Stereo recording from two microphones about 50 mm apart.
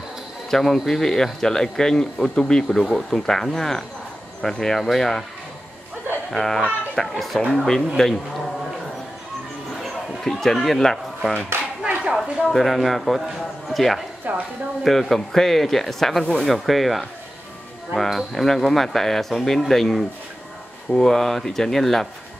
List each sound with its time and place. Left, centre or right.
0.5 s speech: centre
6.3 s a child's voice: centre
9.8 s a sound: centre
11.8 s clapping: centre
12.4 s speech: centre
14.3 s speech: right
14.8 s speech: centre